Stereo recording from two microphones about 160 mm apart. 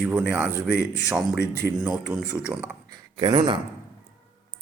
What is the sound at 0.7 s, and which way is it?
Speech, 90° left.